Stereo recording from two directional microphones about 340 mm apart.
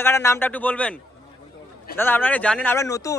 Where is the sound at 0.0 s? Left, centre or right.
Centre.